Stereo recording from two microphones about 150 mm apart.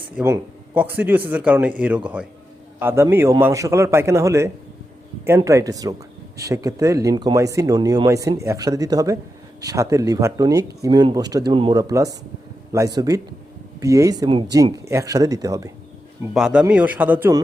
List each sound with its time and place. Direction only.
0.2 s a man's voice: 15° right (ahead or behind)
16.3 s a man's voice: 5° right (ahead or behind)